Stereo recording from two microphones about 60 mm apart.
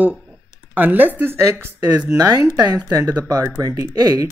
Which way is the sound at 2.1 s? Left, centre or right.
Right.